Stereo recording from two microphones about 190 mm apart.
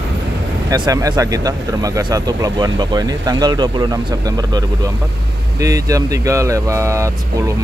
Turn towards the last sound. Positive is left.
turn(degrees=-15)  # may be behind; listen again after turning